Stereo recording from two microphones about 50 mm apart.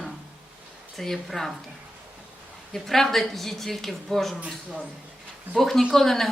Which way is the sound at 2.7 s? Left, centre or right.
Centre.